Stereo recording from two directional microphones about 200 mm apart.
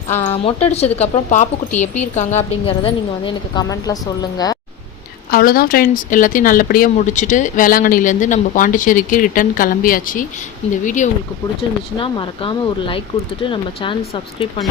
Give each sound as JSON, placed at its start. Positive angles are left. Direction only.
{"t": 0.2, "sound": "a woman's voice", "side_deg": 30}
{"t": 5.3, "sound": "speech", "side_deg": 45}
{"t": 11.9, "sound": "a woman's voice", "side_deg": 25}